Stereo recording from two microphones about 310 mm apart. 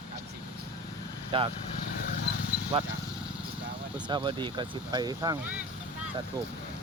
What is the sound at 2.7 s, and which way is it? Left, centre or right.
Speech, centre.